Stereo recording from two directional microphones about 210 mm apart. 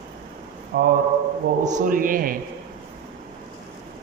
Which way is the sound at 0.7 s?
45° right (ahead or behind).